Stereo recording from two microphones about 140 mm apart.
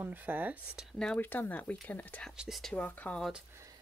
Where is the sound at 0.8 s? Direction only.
Centre (ahead or behind).